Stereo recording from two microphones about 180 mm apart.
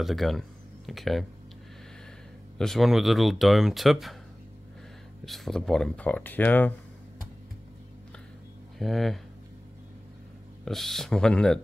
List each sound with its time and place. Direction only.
0.0 s speech: centre (ahead or behind)
2.5 s speech: centre (ahead or behind)
5.2 s speech: centre (ahead or behind)
8.7 s speech: centre (ahead or behind)
10.6 s speech: centre (ahead or behind)